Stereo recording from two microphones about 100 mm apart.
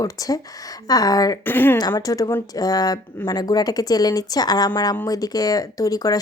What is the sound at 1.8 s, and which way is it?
Speech, 40° left (ahead or behind).